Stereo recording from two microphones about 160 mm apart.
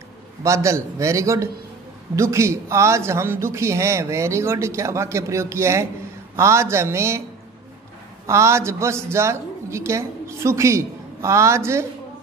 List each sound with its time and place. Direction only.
0.4 s a man's voice: 20° right (ahead or behind)
8.3 s a man's voice: 15° right (ahead or behind)